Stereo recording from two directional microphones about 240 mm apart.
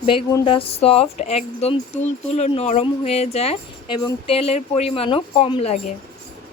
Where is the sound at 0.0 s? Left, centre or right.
Left.